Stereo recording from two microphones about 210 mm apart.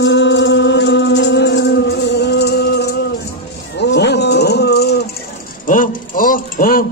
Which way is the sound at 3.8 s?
55° left (ahead or behind).